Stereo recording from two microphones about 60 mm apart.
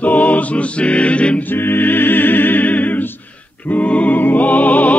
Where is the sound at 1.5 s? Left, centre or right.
Left.